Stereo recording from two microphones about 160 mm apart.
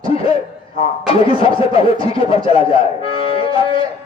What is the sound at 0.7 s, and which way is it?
Speech, 35° left (ahead or behind).